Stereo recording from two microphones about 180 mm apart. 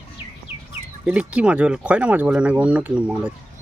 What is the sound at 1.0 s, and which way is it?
Speech, 5° right (ahead or behind).